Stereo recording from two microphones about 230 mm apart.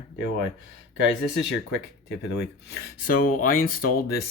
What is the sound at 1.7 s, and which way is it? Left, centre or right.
Speech, left.